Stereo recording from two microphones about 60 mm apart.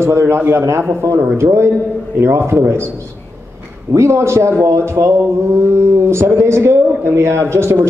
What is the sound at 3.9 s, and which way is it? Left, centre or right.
A man's voice, right.